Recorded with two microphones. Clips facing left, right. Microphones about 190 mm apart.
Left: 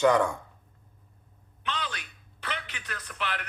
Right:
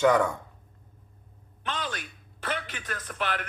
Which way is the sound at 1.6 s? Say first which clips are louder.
Right 1 dB; 45° right (ahead or behind).